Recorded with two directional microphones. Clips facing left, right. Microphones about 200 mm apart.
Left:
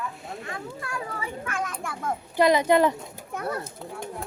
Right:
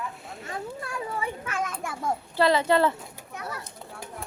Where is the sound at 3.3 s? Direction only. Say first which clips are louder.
Left 7 dB; 55° left (ahead or behind).